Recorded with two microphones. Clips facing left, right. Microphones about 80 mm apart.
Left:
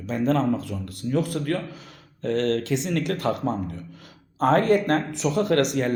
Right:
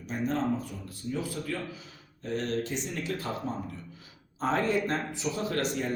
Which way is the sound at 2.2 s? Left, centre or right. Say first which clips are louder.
Left 8 dB; left.